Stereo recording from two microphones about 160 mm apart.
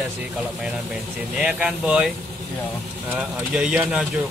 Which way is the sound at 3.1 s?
5° right (ahead or behind).